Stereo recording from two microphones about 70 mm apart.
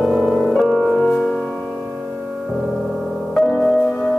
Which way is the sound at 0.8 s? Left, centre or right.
Centre.